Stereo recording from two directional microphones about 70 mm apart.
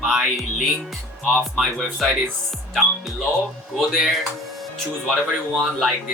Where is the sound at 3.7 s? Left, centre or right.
Centre.